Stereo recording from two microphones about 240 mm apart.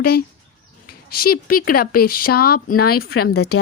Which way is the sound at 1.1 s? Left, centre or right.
Left.